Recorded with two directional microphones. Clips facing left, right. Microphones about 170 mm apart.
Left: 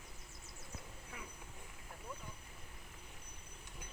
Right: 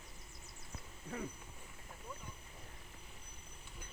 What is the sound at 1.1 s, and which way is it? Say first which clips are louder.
Speech: right 10 dB; 35° right (ahead or behind).